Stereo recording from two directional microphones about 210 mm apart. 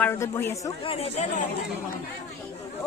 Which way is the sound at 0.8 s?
30° left (ahead or behind).